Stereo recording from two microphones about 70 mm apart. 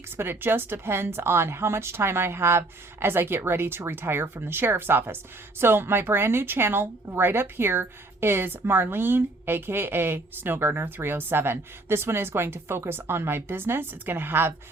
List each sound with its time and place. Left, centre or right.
0.2 s a woman's voice: right